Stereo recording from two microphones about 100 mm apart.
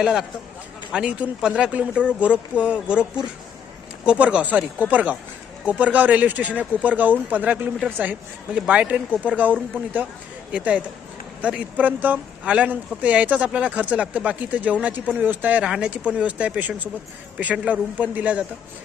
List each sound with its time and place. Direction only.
0.0 s speech: 5° right (ahead or behind)